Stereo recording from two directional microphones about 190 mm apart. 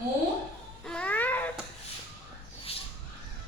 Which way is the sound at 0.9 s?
5° left (ahead or behind).